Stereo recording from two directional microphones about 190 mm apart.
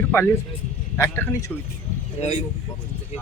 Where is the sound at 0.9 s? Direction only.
10° left (ahead or behind).